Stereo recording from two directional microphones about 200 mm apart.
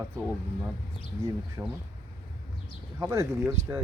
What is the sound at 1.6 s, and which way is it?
Speech, 10° right (ahead or behind).